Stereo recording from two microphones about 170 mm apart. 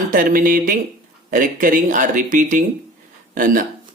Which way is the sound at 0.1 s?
55° right (ahead or behind).